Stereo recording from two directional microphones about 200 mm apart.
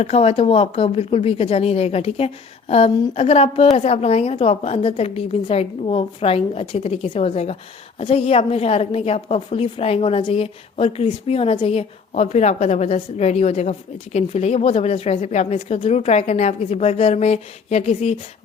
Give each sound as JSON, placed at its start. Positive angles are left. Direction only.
{"t": 0.0, "sound": "a woman's voice", "side_deg": 30}